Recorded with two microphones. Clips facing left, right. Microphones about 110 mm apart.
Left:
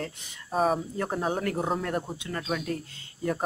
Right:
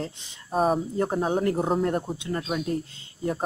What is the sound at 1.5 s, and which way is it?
Speech, 5° right (ahead or behind).